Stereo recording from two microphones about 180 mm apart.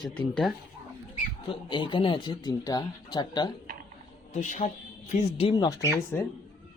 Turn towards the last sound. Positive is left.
turn(degrees=15)  # may be behind; listen again after turning